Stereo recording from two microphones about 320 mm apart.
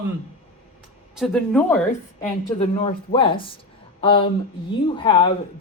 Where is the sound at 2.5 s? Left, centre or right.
Centre.